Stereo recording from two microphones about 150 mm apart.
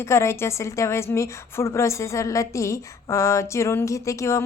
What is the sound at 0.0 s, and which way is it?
Speech, 20° left (ahead or behind).